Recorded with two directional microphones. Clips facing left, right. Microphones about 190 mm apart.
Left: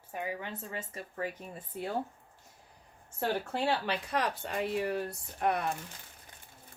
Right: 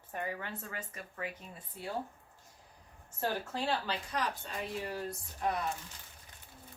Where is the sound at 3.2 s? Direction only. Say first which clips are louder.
Left 4 dB; 65° left (ahead or behind).